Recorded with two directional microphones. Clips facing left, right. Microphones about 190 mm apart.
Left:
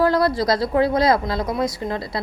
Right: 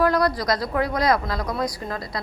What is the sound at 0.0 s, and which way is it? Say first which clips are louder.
A woman's voice: left 3 dB; 25° left (ahead or behind).